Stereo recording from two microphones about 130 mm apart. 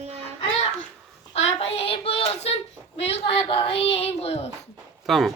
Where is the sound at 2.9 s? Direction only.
50° left (ahead or behind).